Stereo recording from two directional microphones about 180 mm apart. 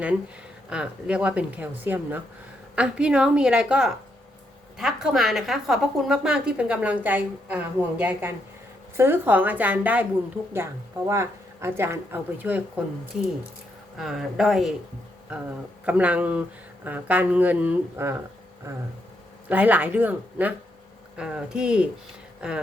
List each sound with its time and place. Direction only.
0.7 s a woman's voice: 5° right (ahead or behind)
11.1 s speech: 15° right (ahead or behind)
13.9 s a woman's voice: centre (ahead or behind)
15.9 s a woman's voice: 10° right (ahead or behind)